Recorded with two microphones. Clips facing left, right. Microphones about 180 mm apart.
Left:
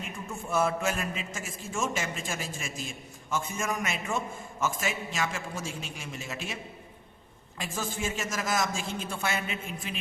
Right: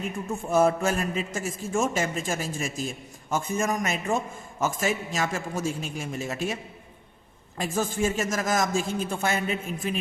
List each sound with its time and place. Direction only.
0.0 s a man's voice: 40° right (ahead or behind)
7.6 s a man's voice: 45° right (ahead or behind)